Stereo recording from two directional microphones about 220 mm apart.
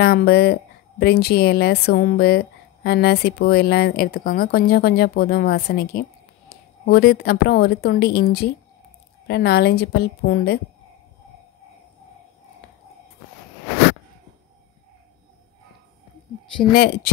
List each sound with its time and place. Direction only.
0.0 s a woman's voice: 45° left (ahead or behind)
16.7 s a woman's voice: 45° left (ahead or behind)